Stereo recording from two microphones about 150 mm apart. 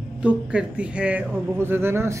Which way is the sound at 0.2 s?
10° right (ahead or behind).